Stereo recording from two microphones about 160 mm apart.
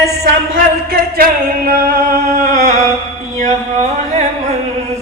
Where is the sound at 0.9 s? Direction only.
70° right (ahead or behind).